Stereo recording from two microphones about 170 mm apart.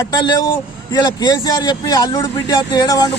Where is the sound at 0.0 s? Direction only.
25° left (ahead or behind).